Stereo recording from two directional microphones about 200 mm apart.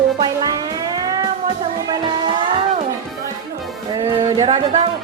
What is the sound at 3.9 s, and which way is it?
Music, 25° right (ahead or behind).